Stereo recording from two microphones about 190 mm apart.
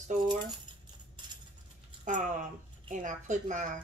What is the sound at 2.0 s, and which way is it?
Speech, 40° right (ahead or behind).